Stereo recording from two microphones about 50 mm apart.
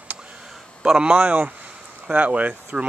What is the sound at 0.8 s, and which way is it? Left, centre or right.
Speech, centre.